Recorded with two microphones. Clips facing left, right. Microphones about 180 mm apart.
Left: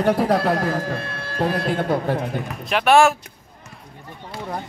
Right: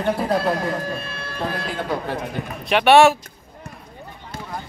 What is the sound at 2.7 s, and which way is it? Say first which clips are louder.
Speech: right 2 dB; centre (ahead or behind).